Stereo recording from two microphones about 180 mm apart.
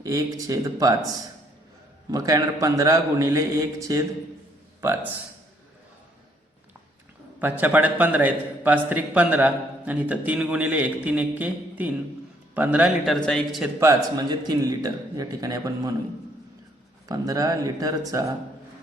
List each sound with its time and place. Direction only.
0.0 s a man's voice: 20° right (ahead or behind)
2.0 s a man's voice: 20° right (ahead or behind)
7.3 s a man's voice: 10° right (ahead or behind)
13.1 s speech: 5° left (ahead or behind)
13.7 s a man's voice: 20° right (ahead or behind)
17.1 s a man's voice: 20° right (ahead or behind)